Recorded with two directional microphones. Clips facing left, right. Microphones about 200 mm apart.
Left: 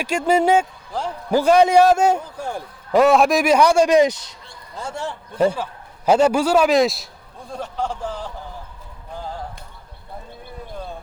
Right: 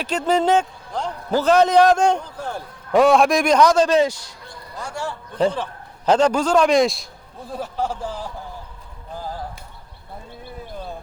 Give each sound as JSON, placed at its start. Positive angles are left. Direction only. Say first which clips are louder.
{"t": 0.0, "sound": "a man's voice", "louder": "left 2 dB", "side_deg": 10}
{"t": 5.4, "sound": "a man's voice", "louder": "left 1 dB", "side_deg": 10}